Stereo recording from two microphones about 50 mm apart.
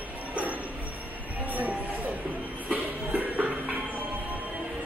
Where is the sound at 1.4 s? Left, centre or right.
Right.